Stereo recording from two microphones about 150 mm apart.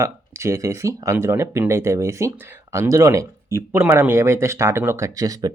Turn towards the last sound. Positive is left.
turn(degrees=-25)  # may be behind; listen again after turning